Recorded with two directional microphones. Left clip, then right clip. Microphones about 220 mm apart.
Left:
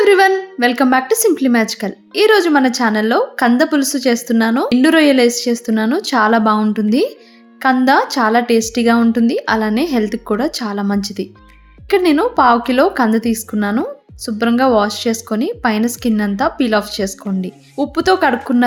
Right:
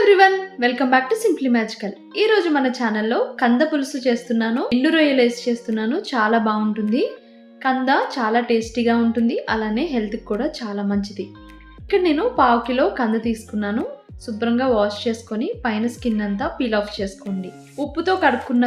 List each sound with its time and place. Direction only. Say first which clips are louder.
0.0 s a woman's voice: left 3 dB; 50° left (ahead or behind)